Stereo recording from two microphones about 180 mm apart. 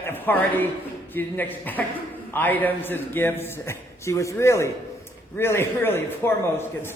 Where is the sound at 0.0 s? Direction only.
10° left (ahead or behind).